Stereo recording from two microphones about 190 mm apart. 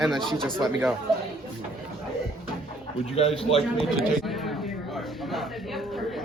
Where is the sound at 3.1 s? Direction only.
30° left (ahead or behind).